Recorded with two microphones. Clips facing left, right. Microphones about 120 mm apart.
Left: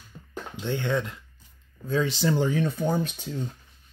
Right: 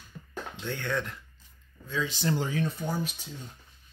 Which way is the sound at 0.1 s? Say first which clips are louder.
Right 1 dB; 20° left (ahead or behind).